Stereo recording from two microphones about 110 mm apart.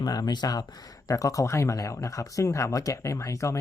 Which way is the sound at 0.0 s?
35° left (ahead or behind).